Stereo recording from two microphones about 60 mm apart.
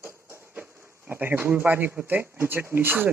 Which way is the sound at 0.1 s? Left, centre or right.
Right.